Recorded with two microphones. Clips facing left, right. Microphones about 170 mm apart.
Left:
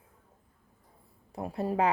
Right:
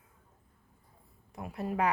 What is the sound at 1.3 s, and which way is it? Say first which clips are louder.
Speech: left 4 dB; 30° left (ahead or behind).